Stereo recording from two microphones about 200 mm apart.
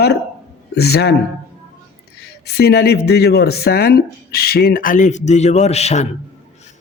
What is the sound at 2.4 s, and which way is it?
Speech, 55° left (ahead or behind).